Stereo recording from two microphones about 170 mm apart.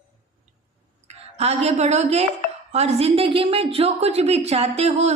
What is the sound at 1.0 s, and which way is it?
A woman's voice, 40° right (ahead or behind).